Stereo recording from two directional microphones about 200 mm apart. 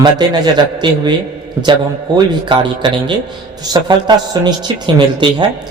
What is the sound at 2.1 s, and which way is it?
A man's voice, 25° right (ahead or behind).